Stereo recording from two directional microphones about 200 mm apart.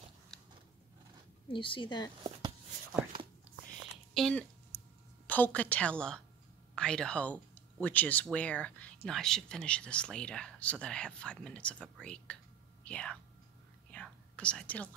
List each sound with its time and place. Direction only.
1.5 s a woman's voice: 25° left (ahead or behind)
3.5 s a sound: 5° right (ahead or behind)
4.1 s a woman's voice: 5° left (ahead or behind)
13.9 s whispering: 5° left (ahead or behind)